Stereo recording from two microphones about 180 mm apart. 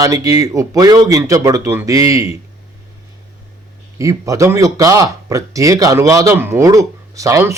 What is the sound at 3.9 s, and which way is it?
Speech, 20° right (ahead or behind).